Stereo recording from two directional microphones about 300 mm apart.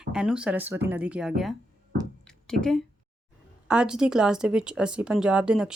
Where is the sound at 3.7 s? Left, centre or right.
Centre.